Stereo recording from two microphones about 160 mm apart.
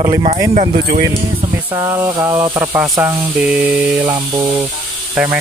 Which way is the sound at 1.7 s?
20° right (ahead or behind).